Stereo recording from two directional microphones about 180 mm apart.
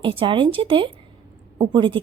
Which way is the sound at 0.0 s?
30° right (ahead or behind).